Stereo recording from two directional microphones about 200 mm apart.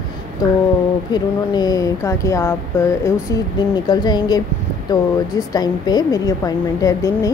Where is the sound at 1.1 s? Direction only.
20° left (ahead or behind).